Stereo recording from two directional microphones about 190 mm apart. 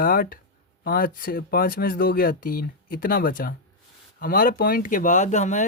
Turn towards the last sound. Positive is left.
turn(degrees=40)  # may be behind; listen again after turning